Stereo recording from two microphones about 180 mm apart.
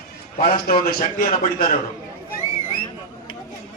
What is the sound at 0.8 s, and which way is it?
Speech, 55° left (ahead or behind).